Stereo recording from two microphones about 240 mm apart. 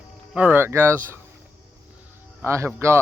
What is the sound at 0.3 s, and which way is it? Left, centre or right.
Speech, centre.